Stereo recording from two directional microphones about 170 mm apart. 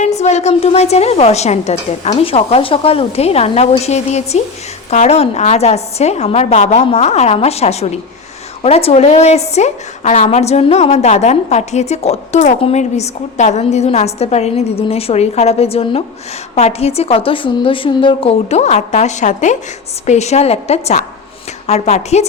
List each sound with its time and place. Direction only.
0.0 s a woman's voice: 40° left (ahead or behind)